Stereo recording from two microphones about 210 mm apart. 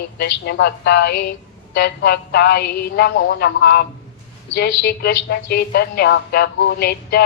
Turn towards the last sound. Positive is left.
turn(degrees=50)  # may be behind; listen again after turning